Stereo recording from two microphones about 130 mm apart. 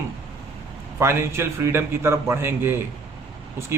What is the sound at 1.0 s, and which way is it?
A man's voice, 20° right (ahead or behind).